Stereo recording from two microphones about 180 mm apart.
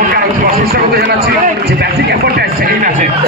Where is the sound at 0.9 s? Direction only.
65° right (ahead or behind).